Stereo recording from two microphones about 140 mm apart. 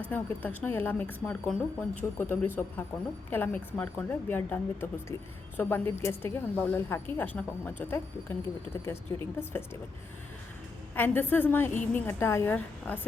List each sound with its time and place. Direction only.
0.1 s speech: 15° left (ahead or behind)
10.9 s speech: 15° left (ahead or behind)